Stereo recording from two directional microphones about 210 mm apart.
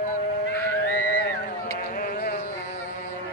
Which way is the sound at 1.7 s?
45° left (ahead or behind).